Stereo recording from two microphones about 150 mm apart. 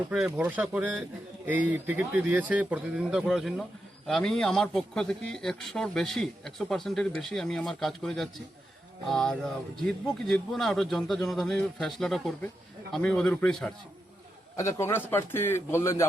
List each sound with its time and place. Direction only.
0.3 s a man's voice: 10° right (ahead or behind)
14.5 s a man's voice: 20° left (ahead or behind)